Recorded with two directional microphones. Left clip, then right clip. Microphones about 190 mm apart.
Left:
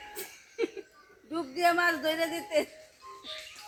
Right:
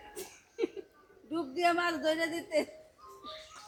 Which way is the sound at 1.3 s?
30° left (ahead or behind).